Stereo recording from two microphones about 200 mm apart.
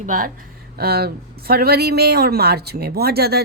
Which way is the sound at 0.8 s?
50° right (ahead or behind).